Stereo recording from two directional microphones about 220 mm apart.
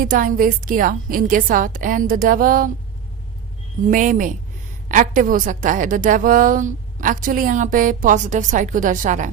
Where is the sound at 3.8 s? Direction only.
35° right (ahead or behind).